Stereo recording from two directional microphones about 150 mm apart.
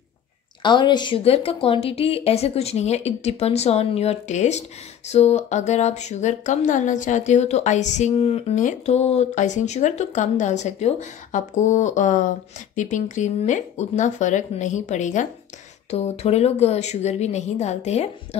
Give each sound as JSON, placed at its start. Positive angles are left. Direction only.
{"t": 0.6, "sound": "a woman's voice", "side_deg": 30}